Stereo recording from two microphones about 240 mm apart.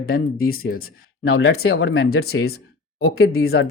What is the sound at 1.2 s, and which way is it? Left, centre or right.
Speech, left.